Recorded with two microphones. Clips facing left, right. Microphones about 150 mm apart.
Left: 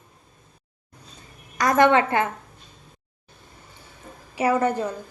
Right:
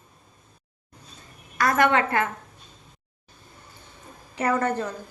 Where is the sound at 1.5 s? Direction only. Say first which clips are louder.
Left 3 dB; 20° left (ahead or behind).